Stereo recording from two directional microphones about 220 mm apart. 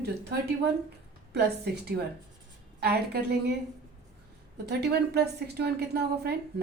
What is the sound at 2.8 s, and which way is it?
Speech, 45° right (ahead or behind).